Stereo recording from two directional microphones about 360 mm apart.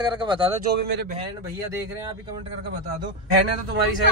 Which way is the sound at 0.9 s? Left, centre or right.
Right.